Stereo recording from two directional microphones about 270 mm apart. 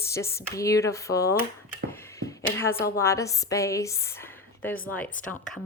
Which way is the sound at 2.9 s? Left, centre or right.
Centre.